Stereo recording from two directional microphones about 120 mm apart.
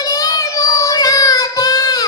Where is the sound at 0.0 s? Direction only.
30° left (ahead or behind).